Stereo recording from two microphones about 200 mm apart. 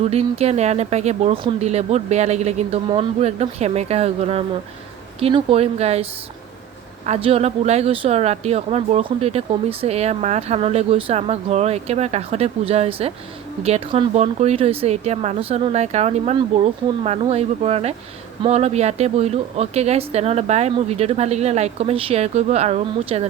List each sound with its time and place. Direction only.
0.0 s speech: 30° right (ahead or behind)